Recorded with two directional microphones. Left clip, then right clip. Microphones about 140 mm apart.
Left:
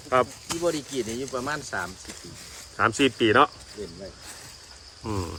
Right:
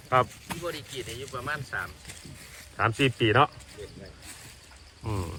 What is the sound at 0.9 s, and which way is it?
Speech, 30° left (ahead or behind).